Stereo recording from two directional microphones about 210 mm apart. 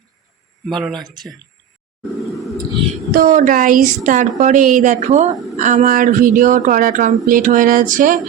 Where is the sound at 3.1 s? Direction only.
40° right (ahead or behind).